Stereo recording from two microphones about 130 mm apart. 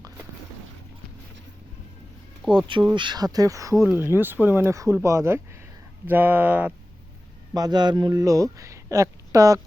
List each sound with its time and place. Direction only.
2.4 s speech: centre (ahead or behind)
2.9 s speech: 35° right (ahead or behind); by 6.7 s 15° right (ahead or behind)
7.5 s speech: 30° right (ahead or behind)